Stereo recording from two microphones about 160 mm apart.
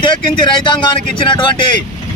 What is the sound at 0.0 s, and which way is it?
Speech, 30° left (ahead or behind).